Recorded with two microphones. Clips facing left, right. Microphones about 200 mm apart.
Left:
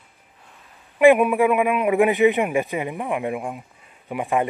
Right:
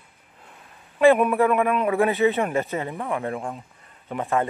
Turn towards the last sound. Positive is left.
turn(degrees=15)  # may be behind; listen again after turning